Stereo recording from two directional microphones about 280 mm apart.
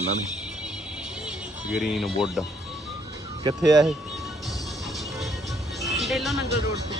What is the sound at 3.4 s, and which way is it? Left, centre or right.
Speech, centre.